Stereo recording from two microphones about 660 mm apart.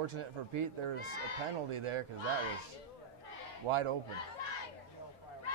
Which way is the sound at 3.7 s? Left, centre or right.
Right.